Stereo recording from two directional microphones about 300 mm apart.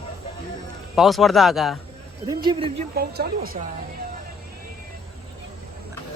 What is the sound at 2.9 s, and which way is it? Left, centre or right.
Speech, right.